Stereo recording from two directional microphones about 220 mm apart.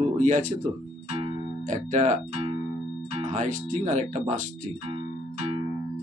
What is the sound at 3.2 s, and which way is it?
Speech, 35° right (ahead or behind).